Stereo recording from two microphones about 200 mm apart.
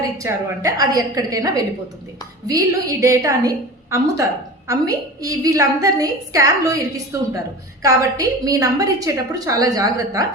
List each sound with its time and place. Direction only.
0.2 s a woman's voice: 15° right (ahead or behind)